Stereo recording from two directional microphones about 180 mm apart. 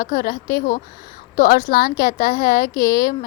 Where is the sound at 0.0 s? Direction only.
50° left (ahead or behind).